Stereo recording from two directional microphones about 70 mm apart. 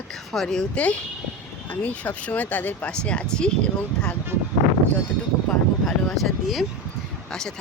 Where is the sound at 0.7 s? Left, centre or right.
Centre.